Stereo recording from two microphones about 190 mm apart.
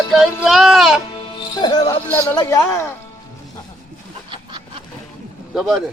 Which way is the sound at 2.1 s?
15° left (ahead or behind).